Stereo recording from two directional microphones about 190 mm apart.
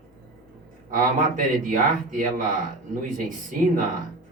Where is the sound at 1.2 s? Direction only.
45° right (ahead or behind).